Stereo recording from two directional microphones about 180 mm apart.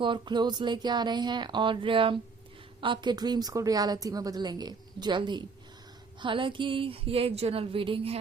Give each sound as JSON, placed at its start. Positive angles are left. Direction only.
{"t": 0.0, "sound": "a woman's voice", "side_deg": -25}